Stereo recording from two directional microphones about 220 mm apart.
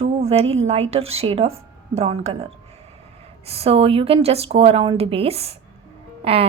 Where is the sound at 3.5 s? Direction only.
25° right (ahead or behind).